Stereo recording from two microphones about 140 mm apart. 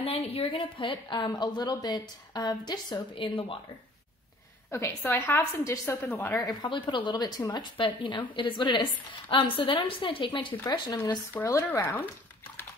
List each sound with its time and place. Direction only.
0.0 s a woman's voice: 45° left (ahead or behind)
4.6 s a woman's voice: 20° left (ahead or behind)
6.4 s a woman's voice: 30° left (ahead or behind)
11.3 s speech: 20° left (ahead or behind)